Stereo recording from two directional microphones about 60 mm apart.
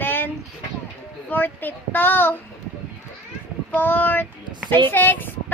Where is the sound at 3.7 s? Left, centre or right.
Left.